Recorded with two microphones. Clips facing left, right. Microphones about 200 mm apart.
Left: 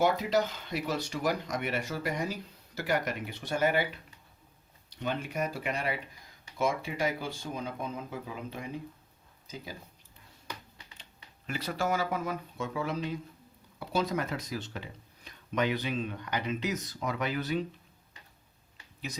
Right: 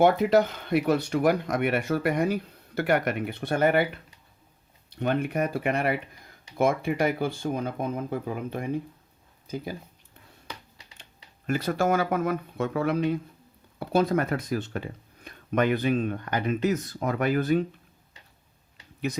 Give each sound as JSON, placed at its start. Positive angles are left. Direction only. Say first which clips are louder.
{"t": 0.0, "sound": "speech", "louder": "right 7 dB", "side_deg": -60}
{"t": 11.4, "sound": "speech", "louder": "right 7 dB", "side_deg": -50}